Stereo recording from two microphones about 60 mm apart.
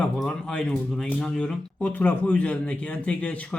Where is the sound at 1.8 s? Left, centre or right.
Left.